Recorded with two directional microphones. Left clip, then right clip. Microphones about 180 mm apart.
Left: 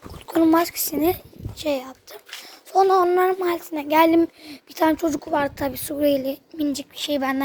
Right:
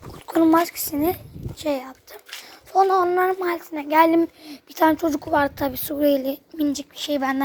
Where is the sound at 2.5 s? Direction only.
20° left (ahead or behind).